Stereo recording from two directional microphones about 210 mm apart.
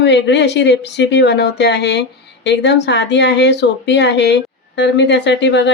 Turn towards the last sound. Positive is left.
turn(degrees=55)  # may be behind; listen again after turning